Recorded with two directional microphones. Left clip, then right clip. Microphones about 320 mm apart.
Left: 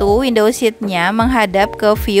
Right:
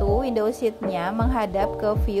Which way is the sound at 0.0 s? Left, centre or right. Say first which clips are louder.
Left 10 dB; left.